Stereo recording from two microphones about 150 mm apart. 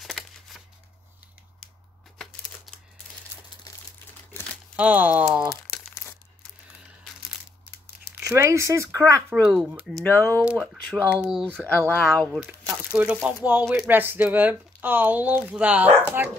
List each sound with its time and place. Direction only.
0.0 s a sound: centre (ahead or behind)
4.7 s speech: 10° right (ahead or behind)
8.2 s speech: 20° right (ahead or behind)
9.3 s speech: 5° right (ahead or behind)
10.0 s speech: 15° left (ahead or behind)
10.7 s typing: centre (ahead or behind)
11.1 s speech: 5° right (ahead or behind)
11.9 s speech: 10° left (ahead or behind)
12.3 s speech: 10° right (ahead or behind)